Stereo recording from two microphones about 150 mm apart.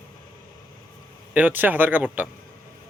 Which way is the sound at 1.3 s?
10° right (ahead or behind).